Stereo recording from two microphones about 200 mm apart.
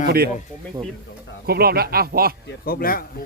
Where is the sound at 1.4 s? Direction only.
50° right (ahead or behind).